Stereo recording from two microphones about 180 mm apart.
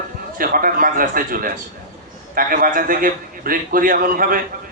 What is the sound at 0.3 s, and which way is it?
A man's voice, 50° right (ahead or behind).